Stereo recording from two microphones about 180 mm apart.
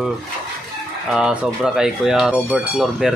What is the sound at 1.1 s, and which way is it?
Speech, 5° right (ahead or behind).